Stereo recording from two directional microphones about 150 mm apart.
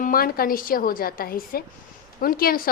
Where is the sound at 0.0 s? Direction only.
75° left (ahead or behind).